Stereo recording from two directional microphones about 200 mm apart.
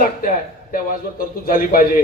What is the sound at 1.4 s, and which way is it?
Speech, 45° left (ahead or behind).